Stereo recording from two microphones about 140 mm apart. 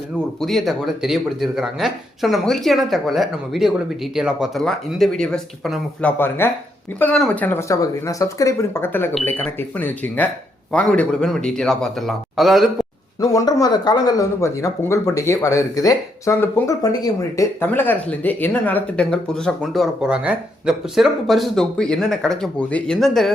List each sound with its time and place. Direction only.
0.3 s speech: centre (ahead or behind)
6.0 s speech: 10° left (ahead or behind)
13.1 s speech: 25° left (ahead or behind)
17.7 s speech: 15° left (ahead or behind)